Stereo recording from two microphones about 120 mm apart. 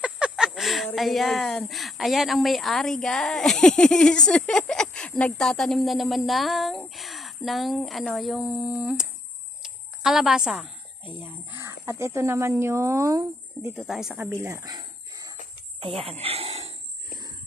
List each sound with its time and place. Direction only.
0.0 s honk: 5° right (ahead or behind)
0.9 s speech: centre (ahead or behind)
11.2 s speech: 20° right (ahead or behind)
13.8 s speech: 5° right (ahead or behind)
14.4 s a sound: 30° right (ahead or behind)
15.8 s a sound: 50° right (ahead or behind)